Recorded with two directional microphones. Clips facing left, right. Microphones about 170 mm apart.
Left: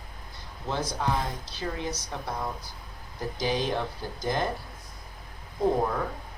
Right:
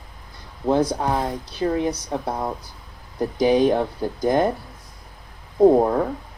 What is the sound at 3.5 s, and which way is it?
Speech, 55° right (ahead or behind).